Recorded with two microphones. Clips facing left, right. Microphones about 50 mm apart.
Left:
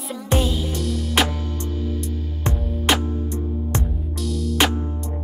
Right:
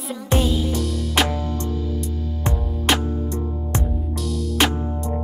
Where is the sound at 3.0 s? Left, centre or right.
Right.